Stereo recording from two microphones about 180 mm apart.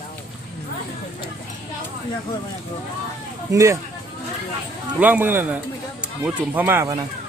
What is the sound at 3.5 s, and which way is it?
Speech, 20° right (ahead or behind).